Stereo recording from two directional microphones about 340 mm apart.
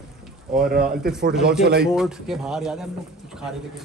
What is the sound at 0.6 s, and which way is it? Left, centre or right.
Speech, right.